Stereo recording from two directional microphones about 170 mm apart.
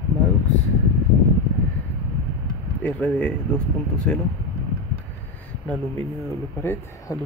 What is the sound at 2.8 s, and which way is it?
Speech, 10° left (ahead or behind).